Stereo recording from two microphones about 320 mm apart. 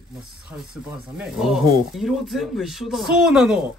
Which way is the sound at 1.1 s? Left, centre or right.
Centre.